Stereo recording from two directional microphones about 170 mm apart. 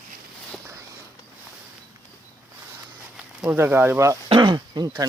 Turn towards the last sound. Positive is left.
turn(degrees=-25)  # may be behind; listen again after turning